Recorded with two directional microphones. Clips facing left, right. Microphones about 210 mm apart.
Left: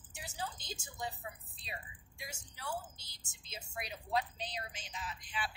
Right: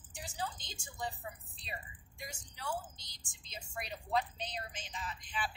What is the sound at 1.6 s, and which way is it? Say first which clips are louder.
A woman's voice: right 1 dB; centre (ahead or behind).